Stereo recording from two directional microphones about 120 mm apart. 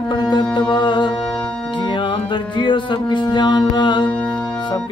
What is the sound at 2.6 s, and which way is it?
Music, 40° left (ahead or behind).